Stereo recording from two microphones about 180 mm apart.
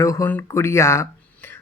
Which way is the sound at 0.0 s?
15° left (ahead or behind).